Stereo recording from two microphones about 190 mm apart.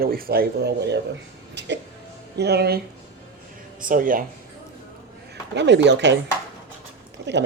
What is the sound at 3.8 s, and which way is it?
Speech, 45° right (ahead or behind).